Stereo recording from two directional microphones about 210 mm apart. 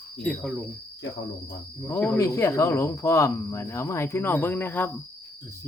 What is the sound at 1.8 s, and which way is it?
Speech, 10° left (ahead or behind).